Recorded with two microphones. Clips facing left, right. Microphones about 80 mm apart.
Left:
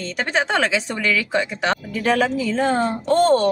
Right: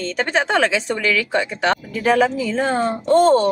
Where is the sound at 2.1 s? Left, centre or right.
Centre.